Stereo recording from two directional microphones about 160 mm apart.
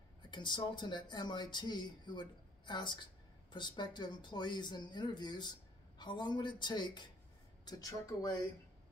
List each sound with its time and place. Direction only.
0.3 s speech: 30° left (ahead or behind)